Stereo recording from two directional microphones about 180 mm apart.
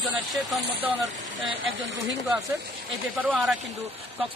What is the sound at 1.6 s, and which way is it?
Speech, 90° right.